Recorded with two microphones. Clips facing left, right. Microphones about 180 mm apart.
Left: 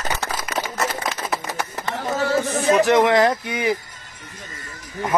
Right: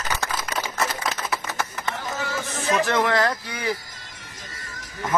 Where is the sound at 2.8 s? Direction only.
20° left (ahead or behind).